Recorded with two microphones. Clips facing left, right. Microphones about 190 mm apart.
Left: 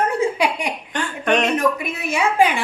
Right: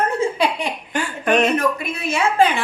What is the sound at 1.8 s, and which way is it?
Speech, 15° left (ahead or behind).